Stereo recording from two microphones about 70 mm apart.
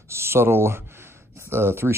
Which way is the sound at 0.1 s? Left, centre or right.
Right.